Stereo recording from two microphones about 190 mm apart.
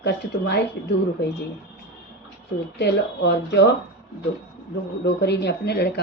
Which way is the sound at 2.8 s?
60° left (ahead or behind).